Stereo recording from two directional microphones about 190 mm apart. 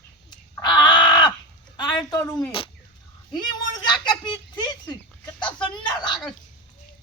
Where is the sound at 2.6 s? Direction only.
30° left (ahead or behind).